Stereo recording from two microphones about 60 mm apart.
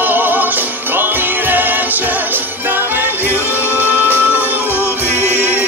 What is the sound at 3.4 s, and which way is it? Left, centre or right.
Music, left.